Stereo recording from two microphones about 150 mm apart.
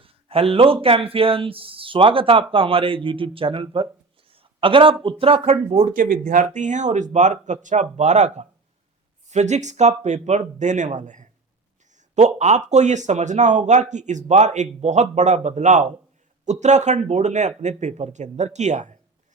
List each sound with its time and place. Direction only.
0.0 s speech: 40° right (ahead or behind)
4.3 s a sound: 35° right (ahead or behind)
5.0 s speech: 40° right (ahead or behind); by 18.9 s 55° right (ahead or behind)